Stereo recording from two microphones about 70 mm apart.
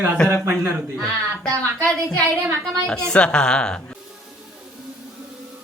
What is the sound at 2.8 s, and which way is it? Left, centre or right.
Speech, centre.